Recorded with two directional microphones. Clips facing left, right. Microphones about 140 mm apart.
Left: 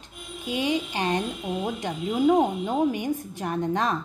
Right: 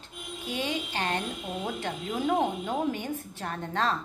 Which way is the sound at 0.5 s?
15° left (ahead or behind).